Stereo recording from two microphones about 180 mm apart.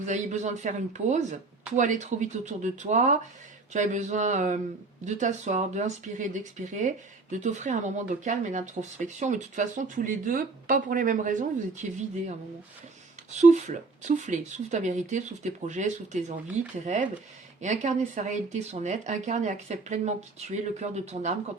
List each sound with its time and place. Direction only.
0.0 s speech: 40° right (ahead or behind)
13.3 s speech: 40° right (ahead or behind)